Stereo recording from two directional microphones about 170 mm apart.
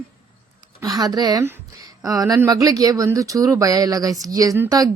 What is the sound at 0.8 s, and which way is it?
Speech, 20° right (ahead or behind).